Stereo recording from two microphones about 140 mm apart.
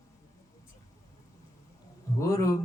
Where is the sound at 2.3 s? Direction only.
20° left (ahead or behind).